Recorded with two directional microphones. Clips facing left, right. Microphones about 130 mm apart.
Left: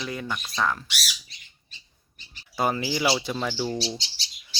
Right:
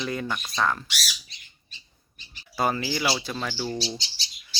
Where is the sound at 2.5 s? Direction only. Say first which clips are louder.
Even; 20° left (ahead or behind).